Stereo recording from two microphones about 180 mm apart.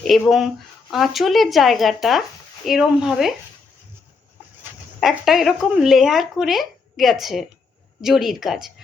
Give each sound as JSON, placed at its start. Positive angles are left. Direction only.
{"t": 0.0, "sound": "speech", "side_deg": 0}
{"t": 4.9, "sound": "speech", "side_deg": 0}